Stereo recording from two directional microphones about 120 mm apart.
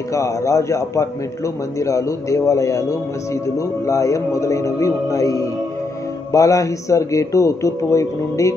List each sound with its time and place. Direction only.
0.1 s a man's voice: 25° left (ahead or behind)